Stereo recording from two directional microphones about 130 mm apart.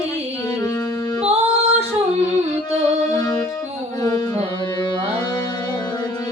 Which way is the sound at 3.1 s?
30° left (ahead or behind).